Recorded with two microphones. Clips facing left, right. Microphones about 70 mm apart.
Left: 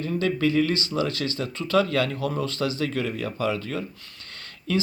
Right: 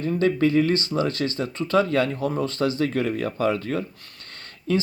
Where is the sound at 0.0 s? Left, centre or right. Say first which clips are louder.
Right 3 dB; right.